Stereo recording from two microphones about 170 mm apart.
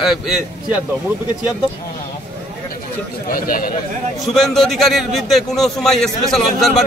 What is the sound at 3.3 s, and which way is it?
Speech, 55° left (ahead or behind).